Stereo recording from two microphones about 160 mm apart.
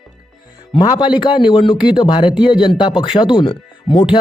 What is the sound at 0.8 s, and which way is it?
Speech, 25° left (ahead or behind).